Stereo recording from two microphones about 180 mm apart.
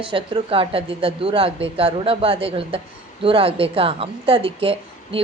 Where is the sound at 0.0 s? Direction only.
30° right (ahead or behind).